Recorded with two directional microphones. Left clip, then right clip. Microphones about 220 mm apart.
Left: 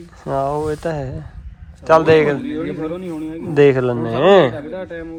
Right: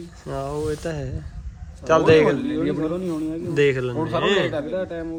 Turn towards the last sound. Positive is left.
turn(degrees=0)  # may be behind; listen again after turning